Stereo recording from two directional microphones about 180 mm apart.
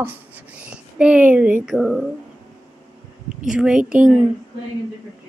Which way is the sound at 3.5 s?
5° right (ahead or behind).